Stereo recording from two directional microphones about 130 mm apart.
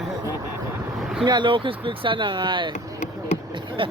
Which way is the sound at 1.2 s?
35° right (ahead or behind).